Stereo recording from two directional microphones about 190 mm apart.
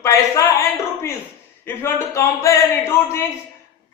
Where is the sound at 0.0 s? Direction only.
15° left (ahead or behind).